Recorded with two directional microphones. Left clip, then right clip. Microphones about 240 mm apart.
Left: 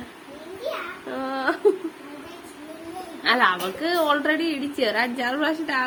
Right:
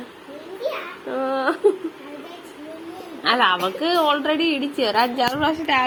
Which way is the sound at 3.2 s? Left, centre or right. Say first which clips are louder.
Right 2 dB; centre.